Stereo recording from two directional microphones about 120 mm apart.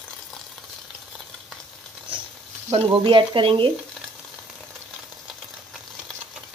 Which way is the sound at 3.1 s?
45° right (ahead or behind).